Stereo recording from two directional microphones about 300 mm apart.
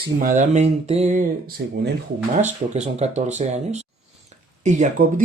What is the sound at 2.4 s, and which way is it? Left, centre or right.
Speech, right.